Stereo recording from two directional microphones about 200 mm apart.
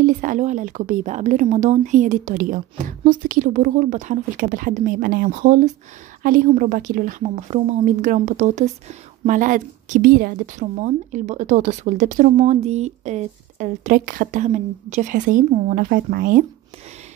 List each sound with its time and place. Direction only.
0.0 s a woman's voice: 40° right (ahead or behind)